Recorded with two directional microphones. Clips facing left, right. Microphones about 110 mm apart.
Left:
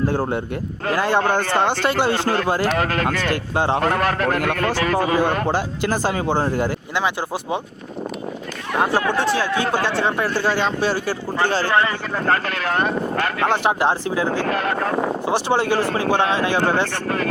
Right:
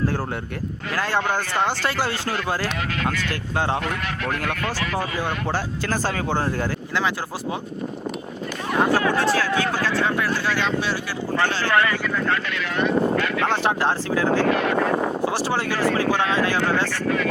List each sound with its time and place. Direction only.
0.1 s speech: 20° left (ahead or behind)
1.2 s speech: 55° left (ahead or behind)
1.8 s speech: 20° left (ahead or behind)
2.1 s a man's voice: 50° left (ahead or behind)
3.5 s speech: 15° left (ahead or behind)
3.8 s a man's voice: 45° left (ahead or behind)
5.5 s speech: 20° left (ahead or behind)
9.0 s speech: 20° left (ahead or behind); by 11.7 s 35° left (ahead or behind)
11.7 s speech: 25° left (ahead or behind)
12.1 s a man's voice: 45° left (ahead or behind)
13.6 s speech: 15° left (ahead or behind)
14.5 s a man's voice: 40° left (ahead or behind)
15.3 s speech: 25° left (ahead or behind)
16.9 s a man's voice: 50° left (ahead or behind)